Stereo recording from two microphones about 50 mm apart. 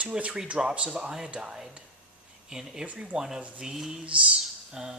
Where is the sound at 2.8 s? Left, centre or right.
Right.